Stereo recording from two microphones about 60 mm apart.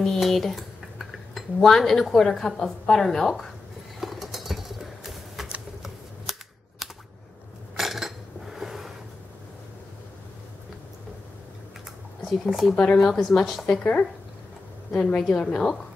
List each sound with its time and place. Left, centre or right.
0.0 s cutlery: centre
4.0 s a sound: centre
6.3 s typing: centre
7.7 s dishes: centre
12.3 s speech: centre
12.7 s speech: centre
13.7 s a woman's voice: left